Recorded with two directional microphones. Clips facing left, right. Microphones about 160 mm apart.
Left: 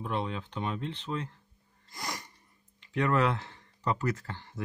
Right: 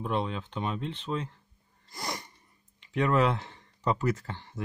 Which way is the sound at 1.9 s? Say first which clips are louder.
Right 2 dB; 35° right (ahead or behind).